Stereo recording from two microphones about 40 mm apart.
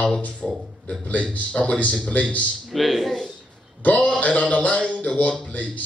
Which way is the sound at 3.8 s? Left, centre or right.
Left.